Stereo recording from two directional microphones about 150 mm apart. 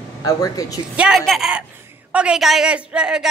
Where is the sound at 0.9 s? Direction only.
5° right (ahead or behind).